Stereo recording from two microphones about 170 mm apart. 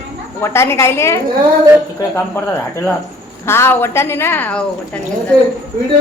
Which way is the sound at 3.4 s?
15° left (ahead or behind).